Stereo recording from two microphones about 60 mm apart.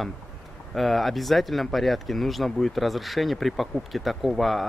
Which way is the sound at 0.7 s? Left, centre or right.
Centre.